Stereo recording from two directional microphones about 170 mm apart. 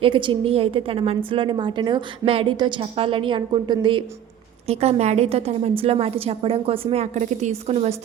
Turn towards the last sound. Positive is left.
turn(degrees=-40)  # may be behind; listen again after turning